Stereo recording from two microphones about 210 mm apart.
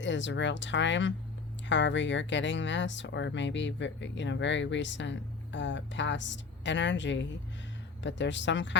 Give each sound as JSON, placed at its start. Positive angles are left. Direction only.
{"t": 0.0, "sound": "speech", "side_deg": 60}